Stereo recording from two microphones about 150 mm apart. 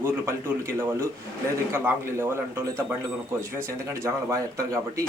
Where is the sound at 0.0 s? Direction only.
15° right (ahead or behind).